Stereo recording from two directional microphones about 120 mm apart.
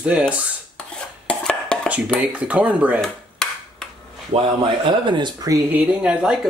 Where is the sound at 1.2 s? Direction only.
10° left (ahead or behind).